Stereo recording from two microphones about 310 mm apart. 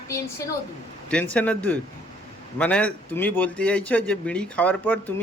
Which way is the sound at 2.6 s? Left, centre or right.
Centre.